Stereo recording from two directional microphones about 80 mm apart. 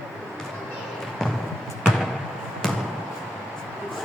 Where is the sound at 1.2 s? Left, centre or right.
Centre.